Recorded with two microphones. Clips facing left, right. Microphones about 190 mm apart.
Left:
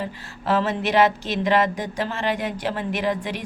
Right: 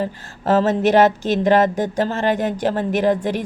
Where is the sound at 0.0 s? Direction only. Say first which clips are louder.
Right 6 dB; 45° right (ahead or behind).